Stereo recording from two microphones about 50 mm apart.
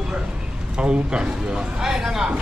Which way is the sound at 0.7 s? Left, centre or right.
Centre.